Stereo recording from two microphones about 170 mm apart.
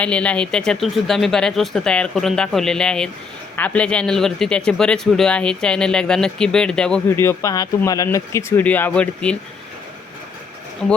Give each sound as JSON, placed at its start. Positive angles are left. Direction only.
{"t": 0.0, "sound": "a man's voice", "side_deg": 5}
{"t": 7.2, "sound": "speech", "side_deg": 15}